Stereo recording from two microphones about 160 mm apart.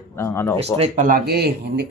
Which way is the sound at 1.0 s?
70° right (ahead or behind).